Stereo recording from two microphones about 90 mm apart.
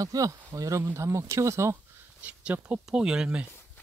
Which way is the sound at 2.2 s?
15° right (ahead or behind).